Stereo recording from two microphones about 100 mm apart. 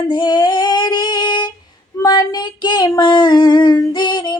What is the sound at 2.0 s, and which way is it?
Child singing, 45° left (ahead or behind).